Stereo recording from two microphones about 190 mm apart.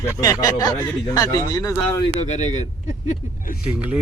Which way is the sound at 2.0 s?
35° left (ahead or behind).